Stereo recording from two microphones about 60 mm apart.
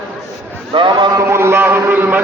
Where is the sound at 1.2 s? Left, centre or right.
Right.